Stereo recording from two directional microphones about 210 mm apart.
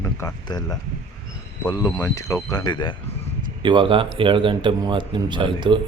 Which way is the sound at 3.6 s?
20° right (ahead or behind).